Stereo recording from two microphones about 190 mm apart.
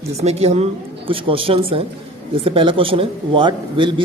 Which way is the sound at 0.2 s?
35° right (ahead or behind).